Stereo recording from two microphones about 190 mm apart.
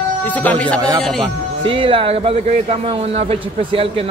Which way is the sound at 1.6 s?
25° right (ahead or behind).